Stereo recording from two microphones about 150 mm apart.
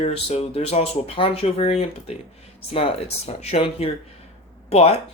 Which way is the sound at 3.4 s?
40° left (ahead or behind).